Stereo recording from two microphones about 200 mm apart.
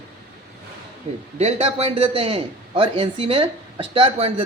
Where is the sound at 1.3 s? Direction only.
35° right (ahead or behind).